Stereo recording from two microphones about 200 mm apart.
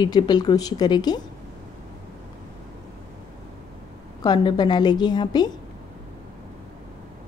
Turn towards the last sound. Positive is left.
turn(degrees=20)  # may be behind; listen again after turning